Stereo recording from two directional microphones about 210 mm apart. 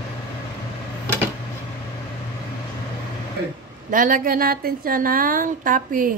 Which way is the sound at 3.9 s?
40° right (ahead or behind).